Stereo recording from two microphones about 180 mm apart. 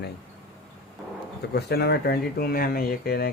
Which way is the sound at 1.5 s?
65° left (ahead or behind).